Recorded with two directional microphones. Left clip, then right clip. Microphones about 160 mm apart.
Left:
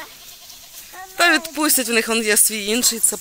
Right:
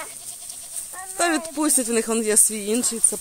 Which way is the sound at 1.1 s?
5° right (ahead or behind).